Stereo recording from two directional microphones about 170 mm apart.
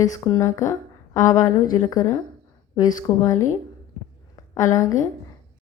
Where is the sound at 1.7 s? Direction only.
20° left (ahead or behind).